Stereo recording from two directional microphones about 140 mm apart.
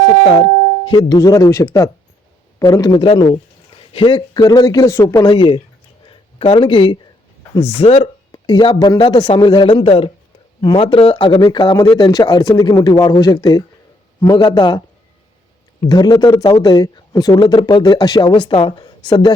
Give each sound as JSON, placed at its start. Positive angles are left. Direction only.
{"t": 0.9, "sound": "speech", "side_deg": 30}
{"t": 3.0, "sound": "speech", "side_deg": 40}
{"t": 3.8, "sound": "a sound", "side_deg": 40}
{"t": 4.4, "sound": "speech", "side_deg": 25}
{"t": 5.3, "sound": "speech", "side_deg": 35}
{"t": 8.3, "sound": "speech", "side_deg": 30}
{"t": 15.8, "sound": "speech", "side_deg": 30}